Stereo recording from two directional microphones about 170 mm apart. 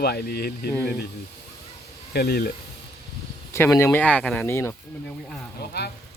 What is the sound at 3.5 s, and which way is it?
Speech, 15° left (ahead or behind).